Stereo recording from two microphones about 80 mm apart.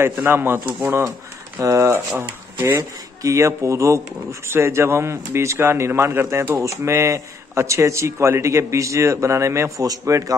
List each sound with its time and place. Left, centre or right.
0.2 s speech: right
1.6 s speech: right